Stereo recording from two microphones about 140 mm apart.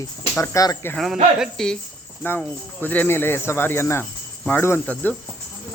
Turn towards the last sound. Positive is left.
turn(degrees=15)  # may be behind; listen again after turning